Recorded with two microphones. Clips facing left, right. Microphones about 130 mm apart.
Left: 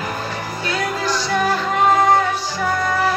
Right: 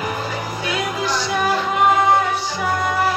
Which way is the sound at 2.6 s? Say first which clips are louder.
Left 1 dB; 10° right (ahead or behind).